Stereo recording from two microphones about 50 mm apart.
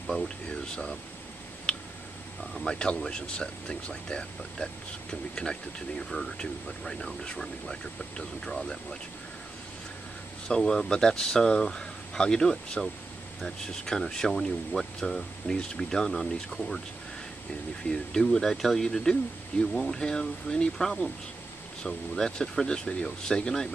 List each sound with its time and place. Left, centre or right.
0.2 s speech: centre
2.5 s speech: centre
10.5 s speech: centre
17.8 s speech: left
18.2 s speech: centre